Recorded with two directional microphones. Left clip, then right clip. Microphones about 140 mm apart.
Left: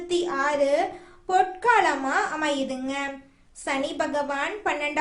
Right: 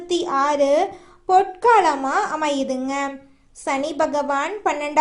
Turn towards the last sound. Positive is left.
turn(degrees=-25)  # may be behind; listen again after turning